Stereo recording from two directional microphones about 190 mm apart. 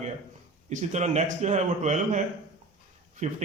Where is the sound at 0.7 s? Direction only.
40° right (ahead or behind).